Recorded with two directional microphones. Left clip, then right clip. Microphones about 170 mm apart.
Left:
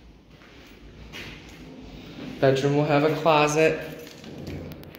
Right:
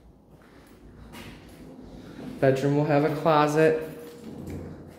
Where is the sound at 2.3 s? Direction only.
30° right (ahead or behind).